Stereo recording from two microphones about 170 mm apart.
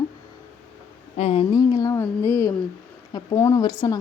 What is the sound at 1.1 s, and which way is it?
Speech, 35° left (ahead or behind).